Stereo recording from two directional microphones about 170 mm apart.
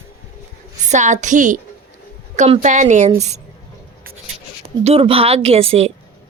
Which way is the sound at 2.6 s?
45° right (ahead or behind).